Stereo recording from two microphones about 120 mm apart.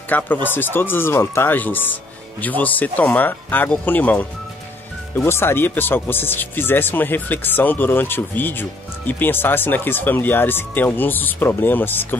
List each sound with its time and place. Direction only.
0.1 s speech: 15° left (ahead or behind)